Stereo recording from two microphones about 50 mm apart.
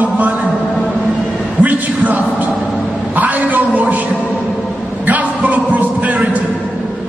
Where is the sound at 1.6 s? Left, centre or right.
Right.